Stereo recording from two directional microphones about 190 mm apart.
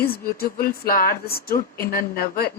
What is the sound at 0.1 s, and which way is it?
Speech, 50° left (ahead or behind).